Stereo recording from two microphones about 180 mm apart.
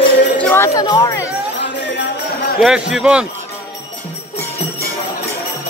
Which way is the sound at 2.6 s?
5° right (ahead or behind).